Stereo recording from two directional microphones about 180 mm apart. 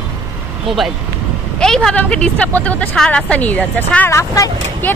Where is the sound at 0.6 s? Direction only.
Centre (ahead or behind).